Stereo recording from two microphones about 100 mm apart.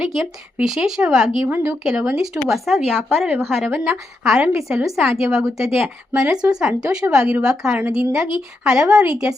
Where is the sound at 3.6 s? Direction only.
20° right (ahead or behind).